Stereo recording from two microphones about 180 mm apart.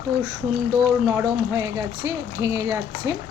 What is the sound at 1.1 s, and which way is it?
Speech, 15° right (ahead or behind).